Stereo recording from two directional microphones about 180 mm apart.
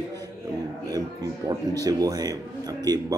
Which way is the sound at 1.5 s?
20° right (ahead or behind).